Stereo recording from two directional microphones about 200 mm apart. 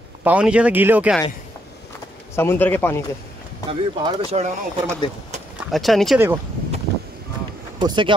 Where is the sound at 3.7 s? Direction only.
30° right (ahead or behind).